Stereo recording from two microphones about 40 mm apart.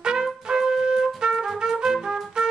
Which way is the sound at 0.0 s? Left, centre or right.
Centre.